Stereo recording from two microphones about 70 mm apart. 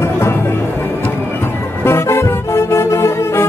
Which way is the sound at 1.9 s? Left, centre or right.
Left.